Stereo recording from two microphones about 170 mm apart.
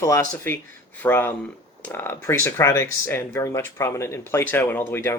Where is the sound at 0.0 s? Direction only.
15° left (ahead or behind).